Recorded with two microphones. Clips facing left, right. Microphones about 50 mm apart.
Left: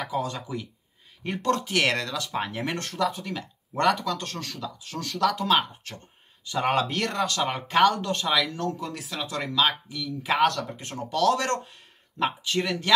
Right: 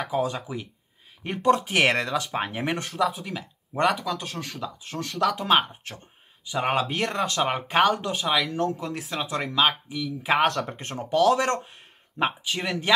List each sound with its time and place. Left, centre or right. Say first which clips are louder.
0.1 s speech: right 3 dB; centre
4.5 s speech: right 2 dB; right
7.8 s speech: left 2 dB; centre
9.1 s speech: right 1 dB; right